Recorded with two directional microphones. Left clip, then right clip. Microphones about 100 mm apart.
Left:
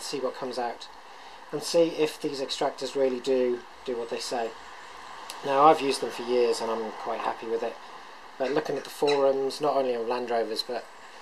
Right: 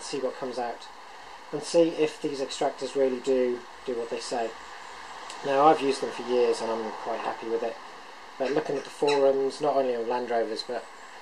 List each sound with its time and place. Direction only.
0.1 s speech: 30° left (ahead or behind)